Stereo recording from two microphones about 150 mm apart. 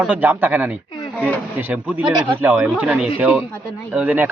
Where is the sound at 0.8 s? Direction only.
30° left (ahead or behind).